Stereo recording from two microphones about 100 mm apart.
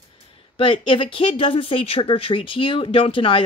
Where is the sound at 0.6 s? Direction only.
60° left (ahead or behind).